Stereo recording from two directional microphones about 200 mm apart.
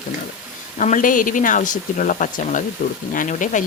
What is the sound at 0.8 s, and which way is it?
Speech, 40° left (ahead or behind).